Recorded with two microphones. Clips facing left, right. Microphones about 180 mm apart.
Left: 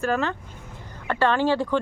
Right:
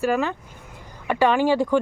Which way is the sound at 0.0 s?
10° right (ahead or behind).